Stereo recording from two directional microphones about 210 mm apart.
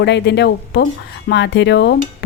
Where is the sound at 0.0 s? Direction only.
55° left (ahead or behind).